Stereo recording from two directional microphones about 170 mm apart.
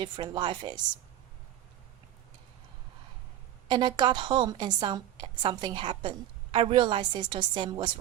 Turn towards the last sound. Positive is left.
turn(degrees=-30)  # may be behind; listen again after turning